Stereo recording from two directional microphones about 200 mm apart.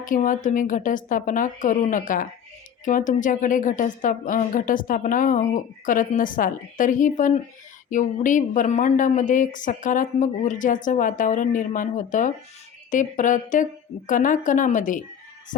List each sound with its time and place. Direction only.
0.0 s a woman's voice: 40° left (ahead or behind)